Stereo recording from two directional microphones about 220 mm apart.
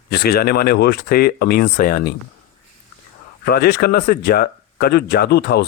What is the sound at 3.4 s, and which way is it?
Speech, 45° left (ahead or behind).